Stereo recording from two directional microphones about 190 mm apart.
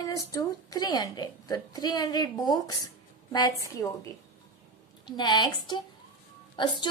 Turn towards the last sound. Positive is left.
turn(degrees=25)  # may be behind; listen again after turning